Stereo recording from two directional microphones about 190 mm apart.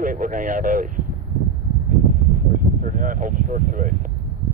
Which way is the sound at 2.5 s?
45° right (ahead or behind).